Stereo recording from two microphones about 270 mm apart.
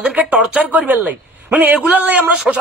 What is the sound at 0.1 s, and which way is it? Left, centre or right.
A man's voice, centre.